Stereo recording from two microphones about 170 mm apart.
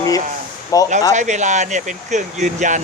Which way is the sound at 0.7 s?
20° left (ahead or behind).